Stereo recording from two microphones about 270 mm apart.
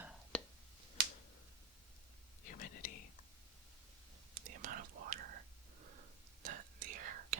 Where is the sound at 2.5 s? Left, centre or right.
Left.